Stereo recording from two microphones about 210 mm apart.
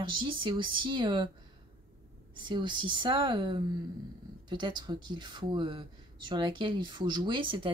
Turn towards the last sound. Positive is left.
turn(degrees=-25)  # may be behind; listen again after turning